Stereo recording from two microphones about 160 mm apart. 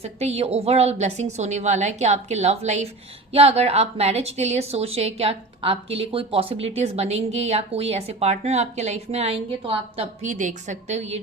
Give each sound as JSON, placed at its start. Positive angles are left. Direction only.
{"t": 0.0, "sound": "a woman's voice", "side_deg": -40}
{"t": 10.2, "sound": "a woman's voice", "side_deg": -50}